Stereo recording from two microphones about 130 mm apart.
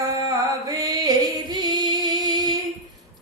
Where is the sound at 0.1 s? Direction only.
25° right (ahead or behind).